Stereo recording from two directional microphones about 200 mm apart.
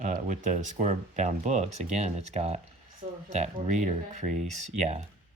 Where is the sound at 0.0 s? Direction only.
40° right (ahead or behind).